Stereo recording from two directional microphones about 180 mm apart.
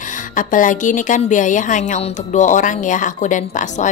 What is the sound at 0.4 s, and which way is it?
A woman's voice, 45° left (ahead or behind).